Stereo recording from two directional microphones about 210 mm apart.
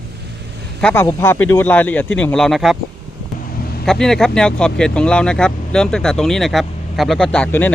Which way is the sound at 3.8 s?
Centre (ahead or behind).